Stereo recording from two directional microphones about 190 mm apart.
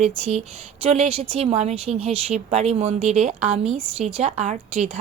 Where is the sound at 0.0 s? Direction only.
35° right (ahead or behind).